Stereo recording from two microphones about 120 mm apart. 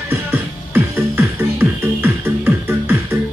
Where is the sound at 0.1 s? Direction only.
20° right (ahead or behind).